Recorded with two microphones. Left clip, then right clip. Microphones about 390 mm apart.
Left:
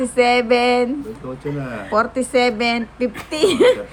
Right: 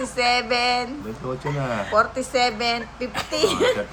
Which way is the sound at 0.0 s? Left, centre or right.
Centre.